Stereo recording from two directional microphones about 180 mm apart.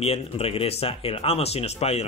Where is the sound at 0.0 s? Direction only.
35° left (ahead or behind).